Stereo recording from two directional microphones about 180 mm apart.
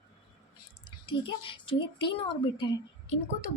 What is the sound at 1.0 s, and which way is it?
Speech, 30° left (ahead or behind).